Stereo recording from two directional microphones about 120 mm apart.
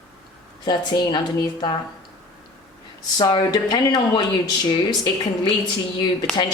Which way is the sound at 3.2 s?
35° left (ahead or behind).